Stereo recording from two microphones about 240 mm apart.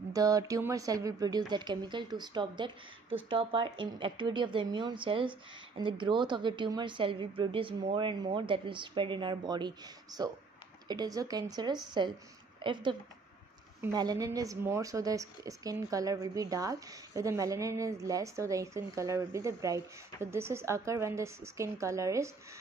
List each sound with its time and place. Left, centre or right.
0.1 s a woman's voice: centre